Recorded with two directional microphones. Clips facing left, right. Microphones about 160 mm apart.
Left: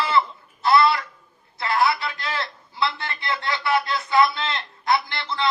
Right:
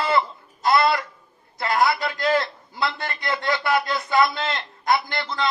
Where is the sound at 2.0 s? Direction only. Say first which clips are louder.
Right 7 dB; 45° right (ahead or behind).